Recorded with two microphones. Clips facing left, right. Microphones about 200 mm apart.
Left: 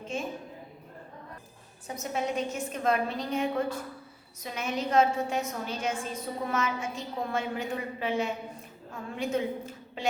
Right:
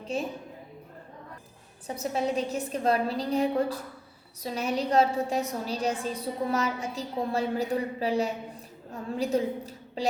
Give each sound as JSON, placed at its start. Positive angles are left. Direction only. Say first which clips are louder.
{"t": 0.0, "sound": "a woman's voice", "louder": "right 3 dB", "side_deg": -35}
{"t": 1.9, "sound": "a woman's voice", "louder": "right 3 dB", "side_deg": -35}